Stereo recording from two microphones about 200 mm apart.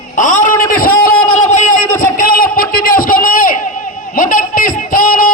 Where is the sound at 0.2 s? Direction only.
40° left (ahead or behind).